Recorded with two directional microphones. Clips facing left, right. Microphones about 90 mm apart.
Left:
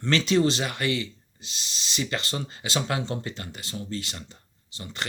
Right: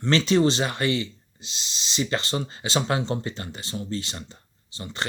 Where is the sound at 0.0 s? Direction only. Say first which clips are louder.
Right 2 dB; 30° right (ahead or behind).